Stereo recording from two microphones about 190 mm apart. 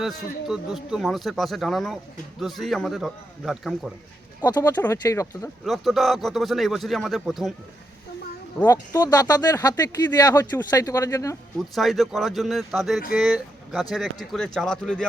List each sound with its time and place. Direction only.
0.0 s speech: centre (ahead or behind)
4.4 s speech: 15° left (ahead or behind)
5.6 s speech: centre (ahead or behind)
8.5 s speech: 15° left (ahead or behind)
11.7 s speech: centre (ahead or behind)